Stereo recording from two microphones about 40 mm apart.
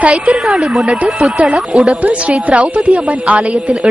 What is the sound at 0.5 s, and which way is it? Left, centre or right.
Speech, centre.